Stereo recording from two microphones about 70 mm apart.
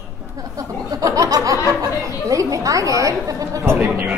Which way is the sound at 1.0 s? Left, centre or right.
Right.